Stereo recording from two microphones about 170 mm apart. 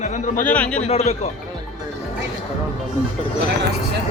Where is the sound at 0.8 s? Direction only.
40° left (ahead or behind).